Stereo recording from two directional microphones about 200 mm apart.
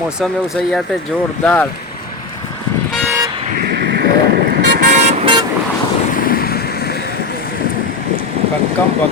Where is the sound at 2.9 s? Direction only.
10° right (ahead or behind).